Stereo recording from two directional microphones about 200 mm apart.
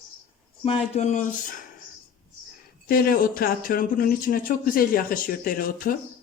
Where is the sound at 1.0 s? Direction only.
35° left (ahead or behind).